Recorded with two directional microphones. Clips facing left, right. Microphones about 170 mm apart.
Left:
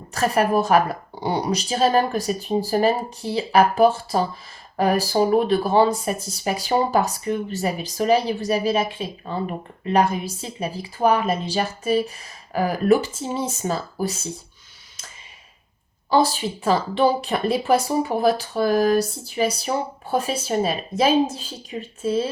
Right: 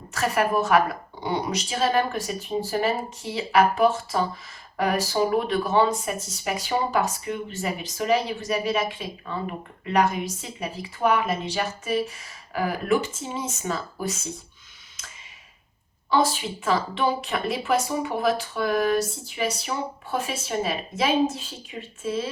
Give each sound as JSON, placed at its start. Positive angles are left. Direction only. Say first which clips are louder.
{"t": 0.1, "sound": "speech", "louder": "left 4 dB", "side_deg": 35}
{"t": 16.6, "sound": "speech", "louder": "left 5 dB", "side_deg": 35}